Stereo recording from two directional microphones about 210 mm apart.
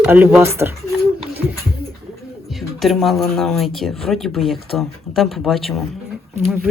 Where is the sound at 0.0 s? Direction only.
10° right (ahead or behind).